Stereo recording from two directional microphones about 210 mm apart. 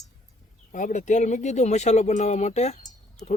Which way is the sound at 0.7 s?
35° left (ahead or behind).